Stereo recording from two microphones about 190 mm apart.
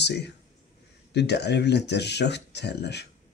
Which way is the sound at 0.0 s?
60° left (ahead or behind).